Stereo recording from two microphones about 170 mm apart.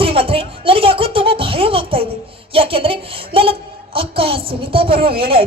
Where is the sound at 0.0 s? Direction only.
35° right (ahead or behind).